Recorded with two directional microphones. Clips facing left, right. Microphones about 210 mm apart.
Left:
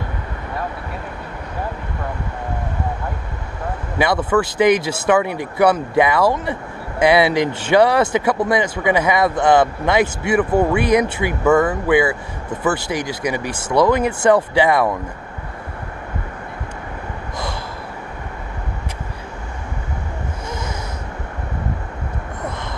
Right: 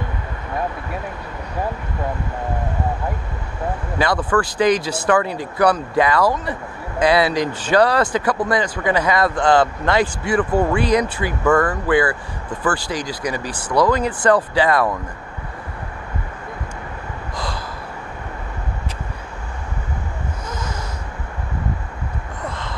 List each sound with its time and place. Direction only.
4.0 s speech: 20° left (ahead or behind)
11.4 s speech: 10° left (ahead or behind)
11.9 s speech: 20° left (ahead or behind)